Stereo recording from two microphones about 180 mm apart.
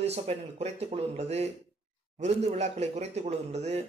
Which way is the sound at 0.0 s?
35° right (ahead or behind).